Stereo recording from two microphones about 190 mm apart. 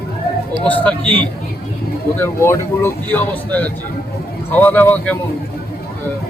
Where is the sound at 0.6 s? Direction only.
5° left (ahead or behind).